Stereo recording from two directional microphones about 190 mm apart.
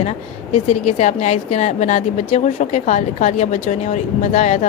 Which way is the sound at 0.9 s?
35° left (ahead or behind).